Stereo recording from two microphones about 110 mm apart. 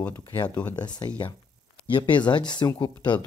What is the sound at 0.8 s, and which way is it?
Speech, 40° left (ahead or behind).